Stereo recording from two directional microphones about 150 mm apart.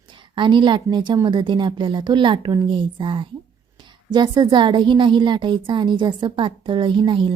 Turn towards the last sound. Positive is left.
turn(degrees=-35)  # may be behind; listen again after turning